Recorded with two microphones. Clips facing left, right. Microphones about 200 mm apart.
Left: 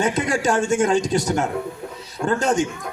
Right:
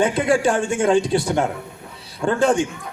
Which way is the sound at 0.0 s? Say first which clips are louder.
Right 3 dB; 45° left (ahead or behind).